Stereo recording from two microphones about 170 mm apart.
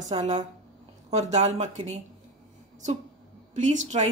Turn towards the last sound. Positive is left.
turn(degrees=-45)  # may be behind; listen again after turning